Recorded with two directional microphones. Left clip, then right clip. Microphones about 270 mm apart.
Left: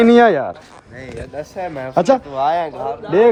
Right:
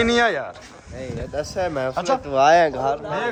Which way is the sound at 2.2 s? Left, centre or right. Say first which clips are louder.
Right 3 dB; right.